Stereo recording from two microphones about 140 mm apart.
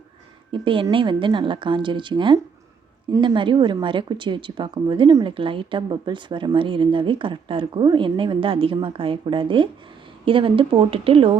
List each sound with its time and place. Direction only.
0.5 s a woman's voice: 40° right (ahead or behind)